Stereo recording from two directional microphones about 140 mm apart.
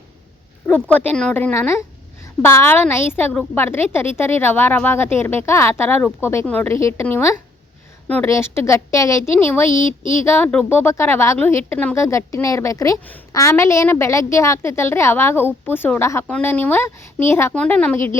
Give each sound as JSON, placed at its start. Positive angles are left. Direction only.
{"t": 0.7, "sound": "a woman's voice", "side_deg": 10}